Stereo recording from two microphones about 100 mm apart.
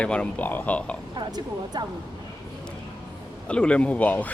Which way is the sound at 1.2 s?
45° right (ahead or behind).